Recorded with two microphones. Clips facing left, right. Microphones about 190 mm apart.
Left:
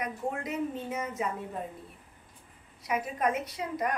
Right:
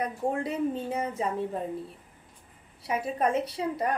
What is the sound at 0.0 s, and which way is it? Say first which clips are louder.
A woman's voice: right 5 dB; 30° right (ahead or behind).